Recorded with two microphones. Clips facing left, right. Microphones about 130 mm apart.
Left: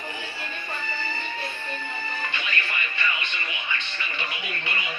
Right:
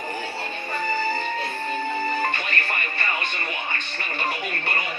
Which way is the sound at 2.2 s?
45° right (ahead or behind).